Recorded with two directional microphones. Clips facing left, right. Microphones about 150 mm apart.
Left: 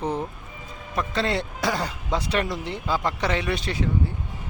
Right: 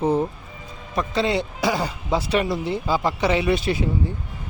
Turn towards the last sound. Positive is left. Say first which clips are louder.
# right 3 dB
turn(degrees=-10)  # may be behind; listen again after turning